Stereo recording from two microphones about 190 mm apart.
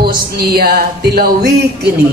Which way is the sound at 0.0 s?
55° right (ahead or behind).